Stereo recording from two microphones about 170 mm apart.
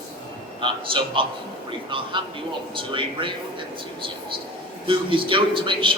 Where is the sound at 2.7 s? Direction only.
30° right (ahead or behind).